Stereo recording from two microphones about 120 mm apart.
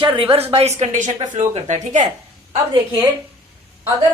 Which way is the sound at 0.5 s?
65° right (ahead or behind).